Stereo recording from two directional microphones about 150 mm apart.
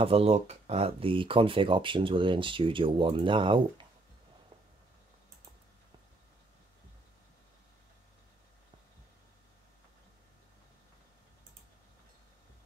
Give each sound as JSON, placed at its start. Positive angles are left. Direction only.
{"t": 0.0, "sound": "speech", "side_deg": -40}